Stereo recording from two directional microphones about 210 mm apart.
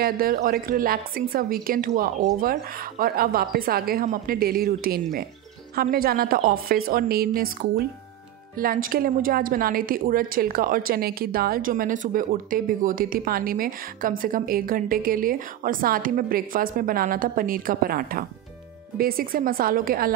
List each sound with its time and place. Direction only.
0.0 s a woman's voice: 45° right (ahead or behind)